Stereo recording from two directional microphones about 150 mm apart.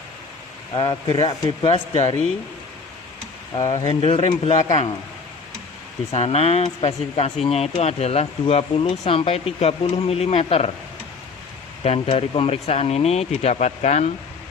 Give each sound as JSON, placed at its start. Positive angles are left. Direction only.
{"t": 0.8, "sound": "speech", "side_deg": 30}
{"t": 3.5, "sound": "speech", "side_deg": 35}
{"t": 6.1, "sound": "speech", "side_deg": 40}
{"t": 11.8, "sound": "speech", "side_deg": 40}